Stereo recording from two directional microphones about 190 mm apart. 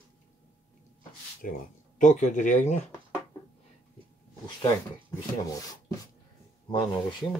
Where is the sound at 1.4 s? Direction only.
40° left (ahead or behind).